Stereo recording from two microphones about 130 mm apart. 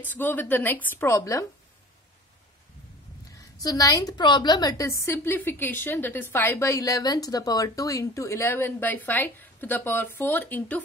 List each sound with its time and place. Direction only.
0.0 s a woman's voice: 15° left (ahead or behind)
3.3 s a woman's voice: 25° left (ahead or behind)